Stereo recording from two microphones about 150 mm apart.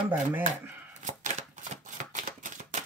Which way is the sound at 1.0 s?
55° right (ahead or behind).